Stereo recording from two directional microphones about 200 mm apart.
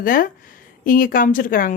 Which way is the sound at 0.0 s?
45° left (ahead or behind).